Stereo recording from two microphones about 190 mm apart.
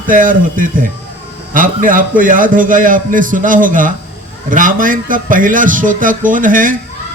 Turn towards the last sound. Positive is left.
turn(degrees=-45)  # may be behind; listen again after turning